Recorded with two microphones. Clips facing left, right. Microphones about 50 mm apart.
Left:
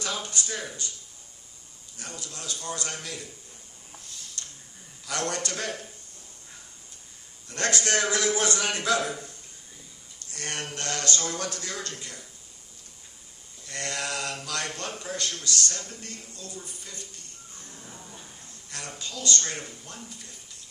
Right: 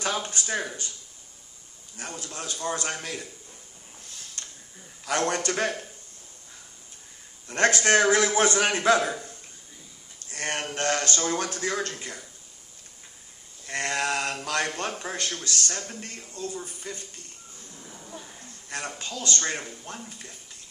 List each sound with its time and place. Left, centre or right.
0.0 s a man's voice: right
2.0 s a man's voice: right
4.4 s a sound: right
5.0 s a man's voice: right
7.4 s a man's voice: right
10.3 s a man's voice: right
13.7 s a man's voice: right
17.7 s a sound: centre
18.7 s a man's voice: right